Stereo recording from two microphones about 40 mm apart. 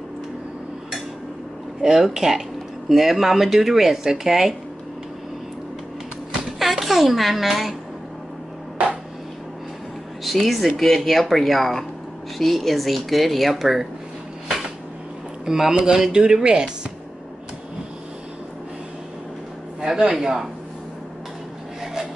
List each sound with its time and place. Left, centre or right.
1.8 s speech: centre
6.6 s speech: centre
10.2 s speech: centre
15.4 s speech: centre
19.9 s speech: centre